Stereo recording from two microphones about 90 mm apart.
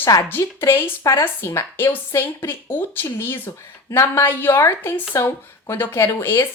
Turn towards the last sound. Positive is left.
turn(degrees=25)  # may be behind; listen again after turning